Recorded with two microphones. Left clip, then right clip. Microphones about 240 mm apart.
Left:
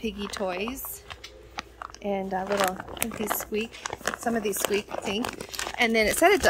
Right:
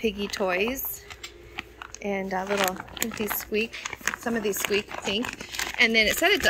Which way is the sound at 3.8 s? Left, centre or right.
Left.